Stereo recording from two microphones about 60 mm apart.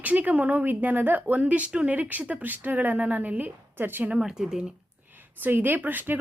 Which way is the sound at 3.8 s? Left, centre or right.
Right.